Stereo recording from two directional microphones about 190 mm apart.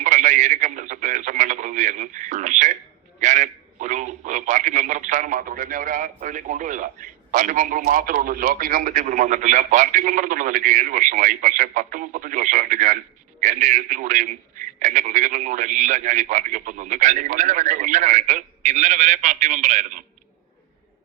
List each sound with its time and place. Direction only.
0.0 s a man's voice: 40° right (ahead or behind)